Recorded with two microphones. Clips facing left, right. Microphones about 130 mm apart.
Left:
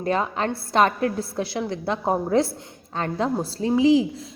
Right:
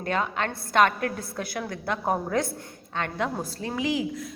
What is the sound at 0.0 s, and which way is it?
A woman's voice, 30° left (ahead or behind).